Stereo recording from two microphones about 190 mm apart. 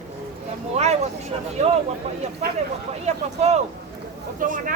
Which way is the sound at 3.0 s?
35° right (ahead or behind).